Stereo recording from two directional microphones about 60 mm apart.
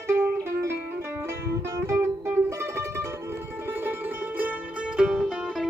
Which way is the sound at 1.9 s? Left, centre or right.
Right.